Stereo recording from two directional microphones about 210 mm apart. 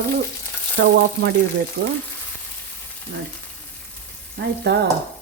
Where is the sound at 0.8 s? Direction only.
60° right (ahead or behind).